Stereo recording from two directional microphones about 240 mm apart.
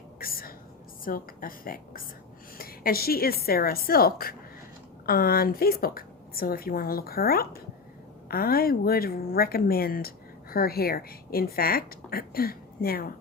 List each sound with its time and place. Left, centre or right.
0.2 s whispering: left
1.0 s a woman's voice: left